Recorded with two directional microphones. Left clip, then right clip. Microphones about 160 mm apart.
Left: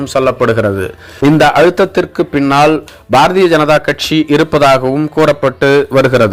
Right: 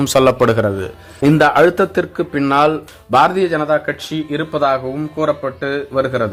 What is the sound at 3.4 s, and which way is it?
Speech, 35° left (ahead or behind).